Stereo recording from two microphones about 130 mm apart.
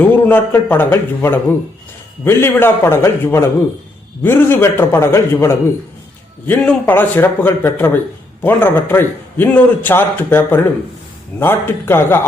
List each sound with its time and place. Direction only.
0.0 s a man's voice: 15° left (ahead or behind)